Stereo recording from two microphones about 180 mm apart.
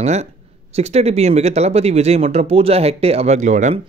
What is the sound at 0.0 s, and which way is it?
Speech, 40° right (ahead or behind).